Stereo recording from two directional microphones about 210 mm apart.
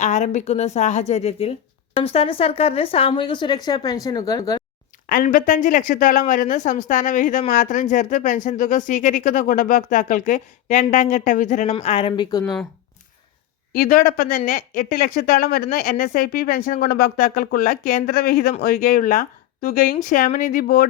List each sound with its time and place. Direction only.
0.0 s a woman's voice: 35° left (ahead or behind); by 4.6 s 20° left (ahead or behind)
5.0 s a woman's voice: 40° left (ahead or behind); by 12.5 s 20° left (ahead or behind)
13.7 s speech: 45° left (ahead or behind)